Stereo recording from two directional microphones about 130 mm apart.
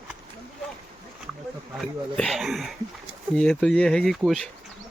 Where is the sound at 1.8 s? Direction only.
Centre (ahead or behind).